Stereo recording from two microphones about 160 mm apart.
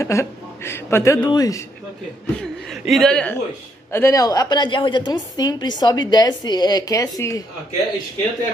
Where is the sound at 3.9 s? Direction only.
20° left (ahead or behind).